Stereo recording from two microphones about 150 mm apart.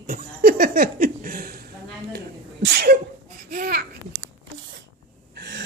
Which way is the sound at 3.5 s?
75° right (ahead or behind).